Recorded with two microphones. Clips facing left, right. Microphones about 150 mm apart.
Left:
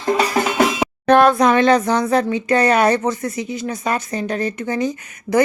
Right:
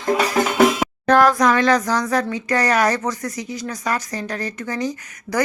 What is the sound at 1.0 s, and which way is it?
Speech, 25° left (ahead or behind).